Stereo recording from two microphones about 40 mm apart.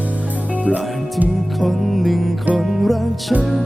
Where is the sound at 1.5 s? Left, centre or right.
Centre.